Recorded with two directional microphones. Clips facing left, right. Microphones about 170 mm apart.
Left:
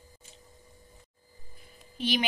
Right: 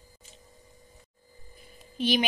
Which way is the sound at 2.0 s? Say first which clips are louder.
Right 3 dB; 15° right (ahead or behind).